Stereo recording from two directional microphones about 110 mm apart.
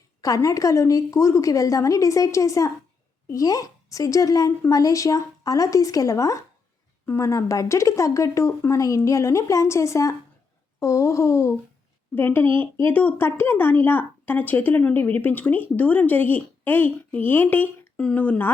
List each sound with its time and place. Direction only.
0.2 s a woman's voice: 30° left (ahead or behind)